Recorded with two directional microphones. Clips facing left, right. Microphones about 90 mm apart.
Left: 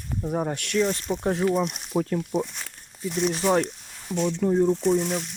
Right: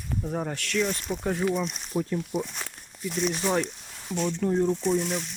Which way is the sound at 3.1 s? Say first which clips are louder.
Left 3 dB; 20° left (ahead or behind).